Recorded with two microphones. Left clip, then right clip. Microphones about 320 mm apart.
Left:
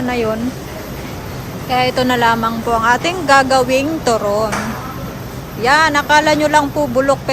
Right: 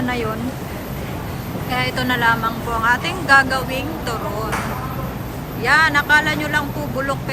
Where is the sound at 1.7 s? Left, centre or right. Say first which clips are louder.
Left 6 dB; centre.